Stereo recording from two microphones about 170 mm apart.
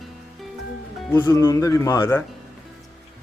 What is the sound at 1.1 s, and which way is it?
Speech, 15° left (ahead or behind).